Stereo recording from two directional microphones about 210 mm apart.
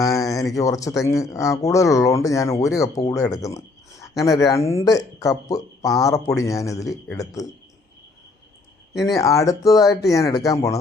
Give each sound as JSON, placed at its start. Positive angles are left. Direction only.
{"t": 0.0, "sound": "a sound", "side_deg": 15}
{"t": 0.5, "sound": "speech", "side_deg": 15}
{"t": 8.9, "sound": "speech", "side_deg": 0}
{"t": 9.1, "sound": "speech", "side_deg": 15}